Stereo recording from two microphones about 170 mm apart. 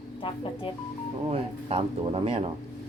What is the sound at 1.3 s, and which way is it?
Speech, 35° right (ahead or behind).